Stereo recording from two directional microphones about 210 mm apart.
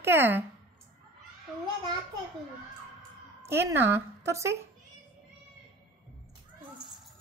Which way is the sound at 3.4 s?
10° right (ahead or behind).